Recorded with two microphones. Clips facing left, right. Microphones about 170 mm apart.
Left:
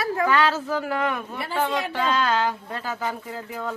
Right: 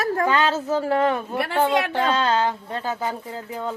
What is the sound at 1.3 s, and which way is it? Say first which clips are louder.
Speech: right 5 dB; 75° right (ahead or behind).